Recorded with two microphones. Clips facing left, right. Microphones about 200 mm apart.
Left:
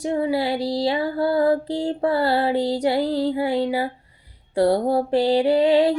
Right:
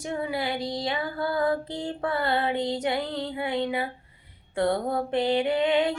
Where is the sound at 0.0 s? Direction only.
30° left (ahead or behind).